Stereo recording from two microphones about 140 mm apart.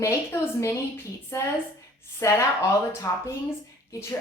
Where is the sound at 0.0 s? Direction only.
20° left (ahead or behind).